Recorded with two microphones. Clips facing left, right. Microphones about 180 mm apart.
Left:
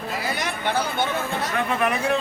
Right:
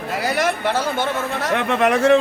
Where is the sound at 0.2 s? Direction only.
75° right (ahead or behind).